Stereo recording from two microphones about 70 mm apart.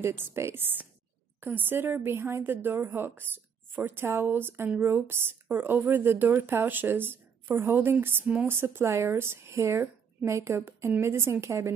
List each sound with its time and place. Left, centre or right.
0.0 s a woman's voice: right